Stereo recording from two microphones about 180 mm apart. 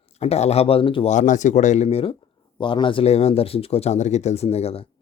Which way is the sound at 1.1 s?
45° left (ahead or behind).